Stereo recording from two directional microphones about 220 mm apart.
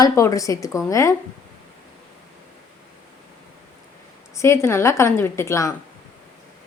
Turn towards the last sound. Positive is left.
turn(degrees=15)  # may be behind; listen again after turning